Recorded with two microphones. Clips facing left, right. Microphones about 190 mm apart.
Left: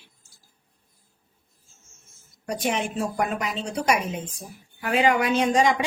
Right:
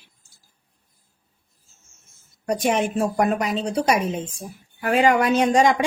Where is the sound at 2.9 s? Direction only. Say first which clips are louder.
Right 5 dB; 45° right (ahead or behind).